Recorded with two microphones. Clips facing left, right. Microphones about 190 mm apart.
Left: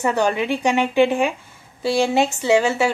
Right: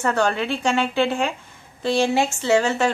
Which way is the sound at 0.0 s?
15° left (ahead or behind).